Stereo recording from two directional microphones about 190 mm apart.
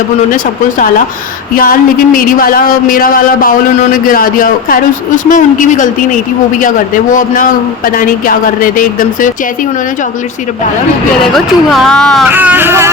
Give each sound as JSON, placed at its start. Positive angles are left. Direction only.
{"t": 1.5, "sound": "a man's voice", "side_deg": 50}
{"t": 11.3, "sound": "speech", "side_deg": 0}
{"t": 12.3, "sound": "a sound", "side_deg": -10}